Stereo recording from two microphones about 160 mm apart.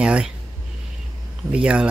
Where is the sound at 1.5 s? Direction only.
5° right (ahead or behind).